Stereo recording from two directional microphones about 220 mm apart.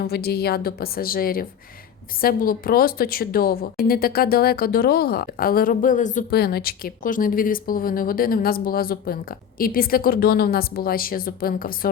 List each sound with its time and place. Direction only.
0.0 s a woman's voice: 45° left (ahead or behind)